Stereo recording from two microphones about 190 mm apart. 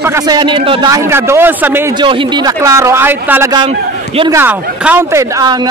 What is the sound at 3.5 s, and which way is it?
Speech, 30° right (ahead or behind).